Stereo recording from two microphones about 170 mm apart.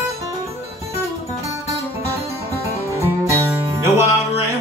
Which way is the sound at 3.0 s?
15° right (ahead or behind).